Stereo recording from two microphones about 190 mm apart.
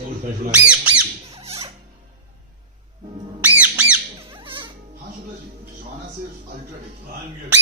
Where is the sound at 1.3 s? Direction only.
30° right (ahead or behind).